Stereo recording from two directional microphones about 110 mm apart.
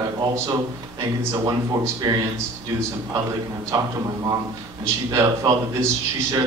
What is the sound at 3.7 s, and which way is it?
A man's voice, 30° right (ahead or behind).